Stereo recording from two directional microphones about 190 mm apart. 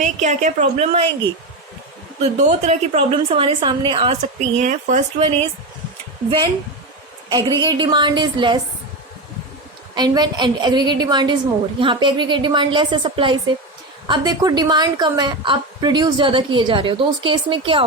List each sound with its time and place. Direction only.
0.0 s a woman's voice: 40° right (ahead or behind)
2.2 s a woman's voice: 35° right (ahead or behind)
7.3 s a woman's voice: 20° right (ahead or behind)
9.9 s a woman's voice: 20° right (ahead or behind)